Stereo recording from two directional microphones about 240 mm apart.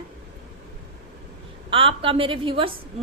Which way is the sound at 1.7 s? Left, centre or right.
Right.